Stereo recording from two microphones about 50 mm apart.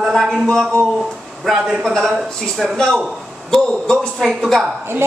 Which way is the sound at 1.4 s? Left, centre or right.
Centre.